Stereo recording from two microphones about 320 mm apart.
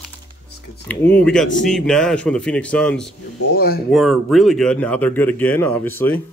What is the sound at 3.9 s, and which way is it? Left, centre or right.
Speech, centre.